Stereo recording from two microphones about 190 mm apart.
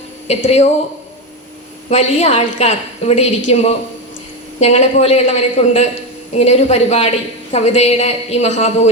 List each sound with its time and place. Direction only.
0.3 s a woman's voice: 35° left (ahead or behind)
1.9 s a woman's voice: 35° left (ahead or behind)